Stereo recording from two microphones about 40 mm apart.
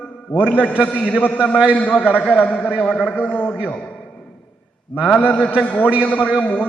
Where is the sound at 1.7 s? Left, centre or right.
Left.